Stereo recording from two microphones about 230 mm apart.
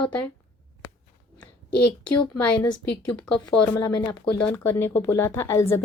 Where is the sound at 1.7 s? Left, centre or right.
Left.